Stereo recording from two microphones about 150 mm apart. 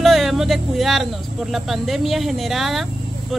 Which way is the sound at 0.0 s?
Centre (ahead or behind).